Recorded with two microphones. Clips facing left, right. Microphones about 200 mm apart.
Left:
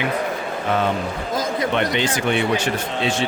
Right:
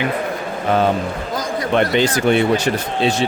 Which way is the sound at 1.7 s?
40° right (ahead or behind).